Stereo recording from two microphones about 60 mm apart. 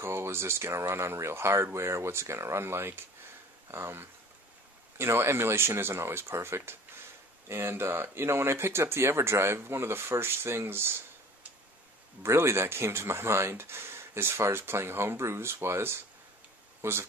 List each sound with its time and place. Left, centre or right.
0.0 s speech: right
12.2 s speech: right